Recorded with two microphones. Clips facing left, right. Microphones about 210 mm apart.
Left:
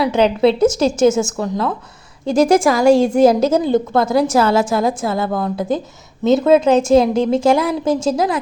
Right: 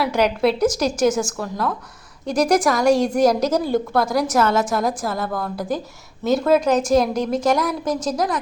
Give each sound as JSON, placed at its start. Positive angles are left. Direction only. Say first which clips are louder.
{"t": 0.1, "sound": "a woman's voice", "louder": "left 5 dB", "side_deg": 25}